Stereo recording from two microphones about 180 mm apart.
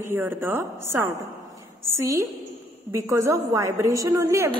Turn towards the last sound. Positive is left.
turn(degrees=-15)  # may be behind; listen again after turning